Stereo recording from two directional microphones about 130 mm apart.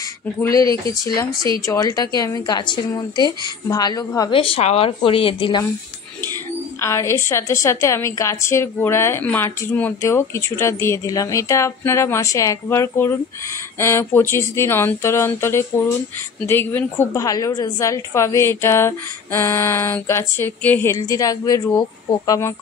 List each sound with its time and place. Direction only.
0.5 s a woman's voice: 25° left (ahead or behind)
4.3 s speech: 45° left (ahead or behind)
6.8 s a woman's voice: 20° left (ahead or behind)